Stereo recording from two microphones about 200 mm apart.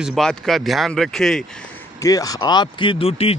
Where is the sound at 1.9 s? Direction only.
15° left (ahead or behind).